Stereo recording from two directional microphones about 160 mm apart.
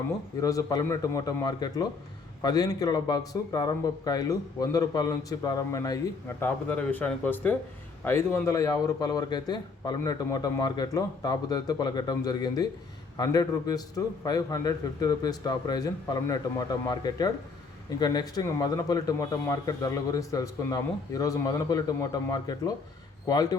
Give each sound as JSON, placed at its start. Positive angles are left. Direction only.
{"t": 0.4, "sound": "speech", "side_deg": 20}